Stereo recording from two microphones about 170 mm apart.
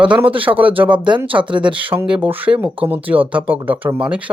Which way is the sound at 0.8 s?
10° right (ahead or behind).